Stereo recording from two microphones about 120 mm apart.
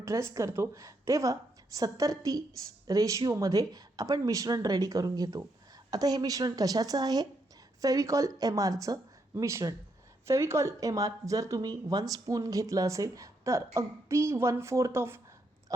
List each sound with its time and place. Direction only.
0.0 s a woman's voice: 25° right (ahead or behind)